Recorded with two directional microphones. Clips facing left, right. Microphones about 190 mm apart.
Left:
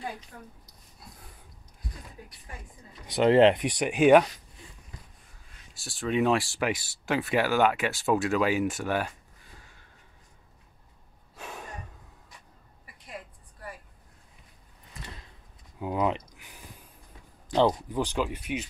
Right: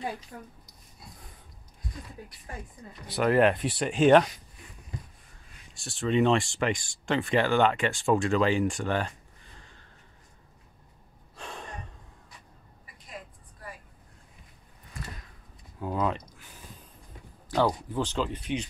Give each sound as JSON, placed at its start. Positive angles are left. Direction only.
{"t": 3.1, "sound": "speech", "side_deg": 25}
{"t": 5.8, "sound": "speech", "side_deg": 0}
{"t": 9.6, "sound": "a sound", "side_deg": 10}
{"t": 11.3, "sound": "gasp", "side_deg": 5}
{"t": 15.8, "sound": "a sound", "side_deg": 15}
{"t": 17.5, "sound": "speech", "side_deg": 20}